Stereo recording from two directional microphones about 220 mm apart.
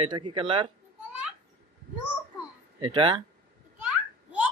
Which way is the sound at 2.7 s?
20° right (ahead or behind).